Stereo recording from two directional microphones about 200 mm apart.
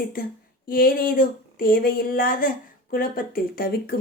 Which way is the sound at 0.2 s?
45° left (ahead or behind).